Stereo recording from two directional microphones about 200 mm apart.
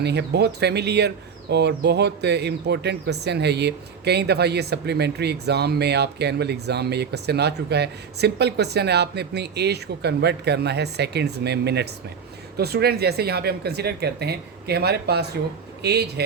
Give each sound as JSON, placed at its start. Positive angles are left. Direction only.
{"t": 0.0, "sound": "speech", "side_deg": -55}